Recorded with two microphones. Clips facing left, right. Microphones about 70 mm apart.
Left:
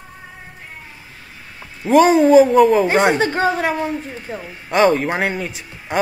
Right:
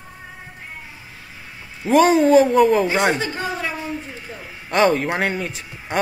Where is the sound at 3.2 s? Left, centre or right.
Left.